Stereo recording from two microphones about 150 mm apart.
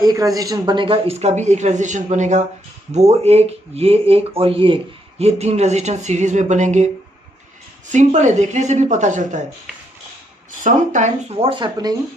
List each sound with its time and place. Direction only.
0.0 s speech: 25° right (ahead or behind)
5.2 s speech: 45° right (ahead or behind)
7.9 s speech: 55° right (ahead or behind)
10.6 s speech: 55° right (ahead or behind)
11.3 s speech: 35° right (ahead or behind)